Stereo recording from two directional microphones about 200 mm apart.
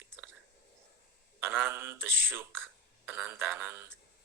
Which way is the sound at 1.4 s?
10° right (ahead or behind).